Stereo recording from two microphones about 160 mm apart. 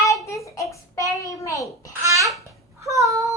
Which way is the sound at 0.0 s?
20° left (ahead or behind).